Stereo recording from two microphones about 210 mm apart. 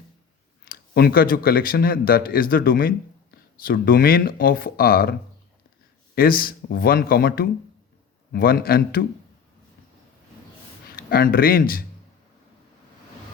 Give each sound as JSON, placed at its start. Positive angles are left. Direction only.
{"t": 0.6, "sound": "speech", "side_deg": 45}
{"t": 6.1, "sound": "speech", "side_deg": 45}
{"t": 10.9, "sound": "speech", "side_deg": 45}